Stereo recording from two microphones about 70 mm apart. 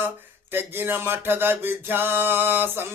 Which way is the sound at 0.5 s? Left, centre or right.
Right.